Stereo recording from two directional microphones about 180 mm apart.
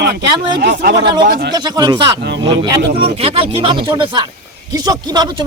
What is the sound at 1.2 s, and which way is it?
Speech, 65° right (ahead or behind).